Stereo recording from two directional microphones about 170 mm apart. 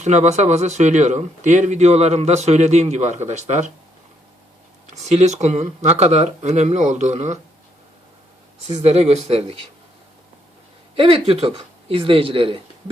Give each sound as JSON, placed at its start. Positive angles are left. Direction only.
{"t": 0.0, "sound": "speech", "side_deg": -45}
{"t": 4.9, "sound": "speech", "side_deg": -45}
{"t": 8.6, "sound": "speech", "side_deg": -40}
{"t": 10.9, "sound": "speech", "side_deg": -35}